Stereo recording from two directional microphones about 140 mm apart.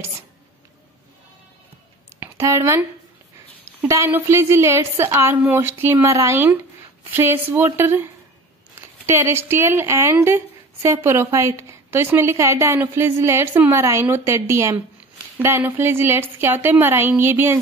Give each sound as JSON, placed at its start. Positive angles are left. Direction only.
{"t": 2.1, "sound": "a woman's voice", "side_deg": -20}